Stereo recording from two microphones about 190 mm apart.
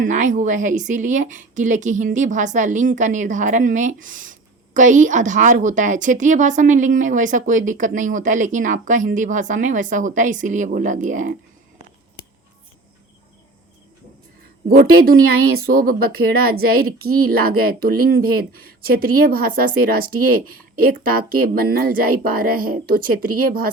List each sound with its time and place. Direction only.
0.0 s speech: 40° right (ahead or behind)
14.9 s speech: 50° right (ahead or behind)